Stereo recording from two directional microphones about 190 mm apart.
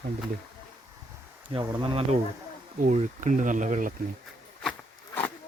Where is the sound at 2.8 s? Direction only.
40° right (ahead or behind).